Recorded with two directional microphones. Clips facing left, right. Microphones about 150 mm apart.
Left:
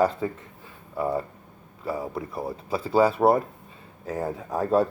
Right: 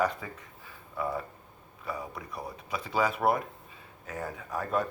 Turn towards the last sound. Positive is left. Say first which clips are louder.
# left 8 dB
turn(degrees=35)  # may be behind; listen again after turning